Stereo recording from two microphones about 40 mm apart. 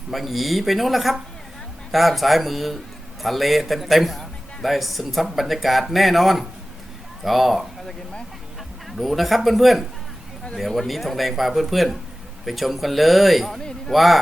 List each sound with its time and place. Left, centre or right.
0.1 s a man's voice: centre
9.0 s a man's voice: centre
13.6 s a man's voice: centre
13.9 s a man's voice: centre